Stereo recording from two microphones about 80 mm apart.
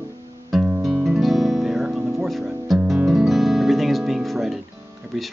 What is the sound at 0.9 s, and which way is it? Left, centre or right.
Music, centre.